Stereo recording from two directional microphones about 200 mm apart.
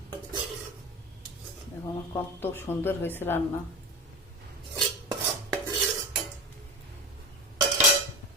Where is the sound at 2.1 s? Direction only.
10° left (ahead or behind).